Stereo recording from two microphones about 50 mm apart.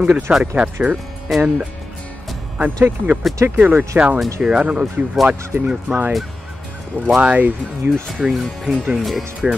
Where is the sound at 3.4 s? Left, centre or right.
Right.